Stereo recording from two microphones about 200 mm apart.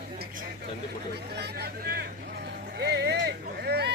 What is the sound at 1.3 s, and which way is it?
Speech, 55° right (ahead or behind).